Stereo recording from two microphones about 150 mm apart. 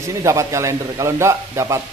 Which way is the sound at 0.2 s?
20° right (ahead or behind).